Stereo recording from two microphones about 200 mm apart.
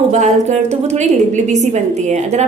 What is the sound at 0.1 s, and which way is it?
A woman's voice, 35° right (ahead or behind).